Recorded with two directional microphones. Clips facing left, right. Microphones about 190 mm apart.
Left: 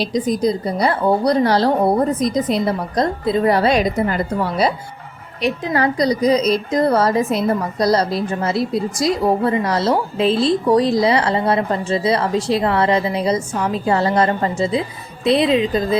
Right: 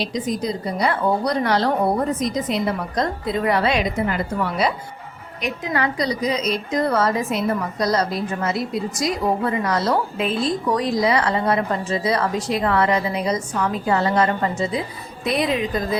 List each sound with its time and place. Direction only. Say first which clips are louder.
0.0 s a woman's voice: left 6 dB; 35° left (ahead or behind)